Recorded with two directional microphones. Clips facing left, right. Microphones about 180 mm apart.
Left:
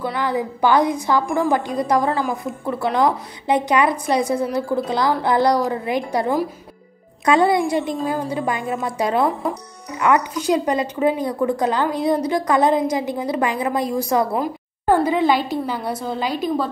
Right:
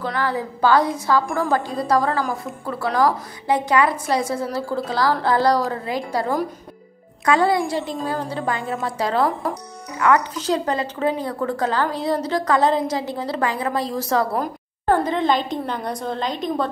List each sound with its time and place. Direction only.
0.0 s a woman's voice: 15° left (ahead or behind)
9.3 s speech: centre (ahead or behind)
9.9 s a woman's voice: 20° left (ahead or behind)